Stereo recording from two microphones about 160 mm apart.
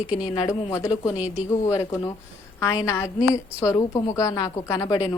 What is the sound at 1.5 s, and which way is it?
A woman's voice, 20° left (ahead or behind).